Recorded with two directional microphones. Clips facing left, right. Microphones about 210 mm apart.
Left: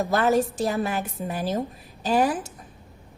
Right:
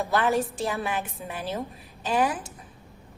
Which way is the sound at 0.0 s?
40° left (ahead or behind).